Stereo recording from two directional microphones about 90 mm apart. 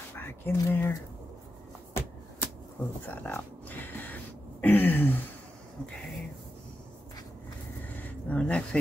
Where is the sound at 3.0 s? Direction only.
20° left (ahead or behind).